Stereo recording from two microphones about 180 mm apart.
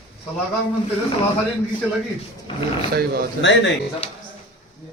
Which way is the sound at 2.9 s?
60° right (ahead or behind).